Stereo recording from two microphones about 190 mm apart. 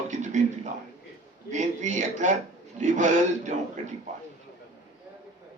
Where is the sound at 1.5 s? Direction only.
40° right (ahead or behind).